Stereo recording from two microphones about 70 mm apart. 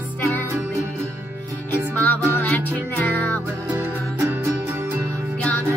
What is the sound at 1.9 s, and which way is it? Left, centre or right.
Music, left.